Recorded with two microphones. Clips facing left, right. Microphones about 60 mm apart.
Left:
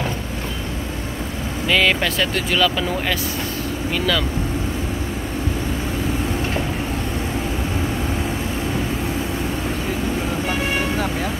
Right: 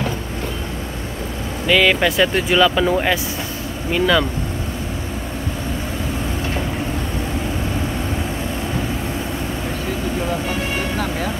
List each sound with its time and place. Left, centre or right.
1.7 s speech: centre
2.0 s speech: centre